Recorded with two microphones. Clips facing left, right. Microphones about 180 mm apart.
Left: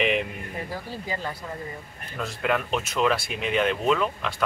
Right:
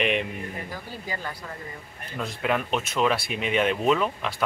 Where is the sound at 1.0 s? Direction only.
20° left (ahead or behind).